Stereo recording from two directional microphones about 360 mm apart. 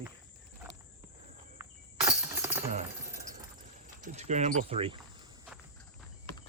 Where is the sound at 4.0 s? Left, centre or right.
Centre.